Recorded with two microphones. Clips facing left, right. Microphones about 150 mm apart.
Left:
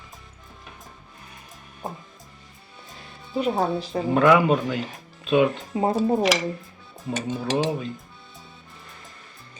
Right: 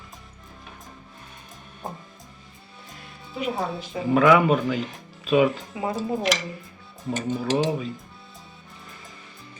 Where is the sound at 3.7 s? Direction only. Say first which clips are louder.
Left 5 dB; 35° left (ahead or behind).